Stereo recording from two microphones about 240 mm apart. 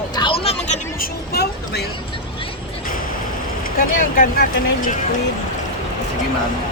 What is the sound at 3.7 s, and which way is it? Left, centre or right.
Speech, left.